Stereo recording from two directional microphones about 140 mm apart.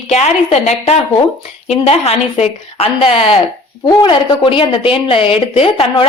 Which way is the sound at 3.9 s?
35° left (ahead or behind).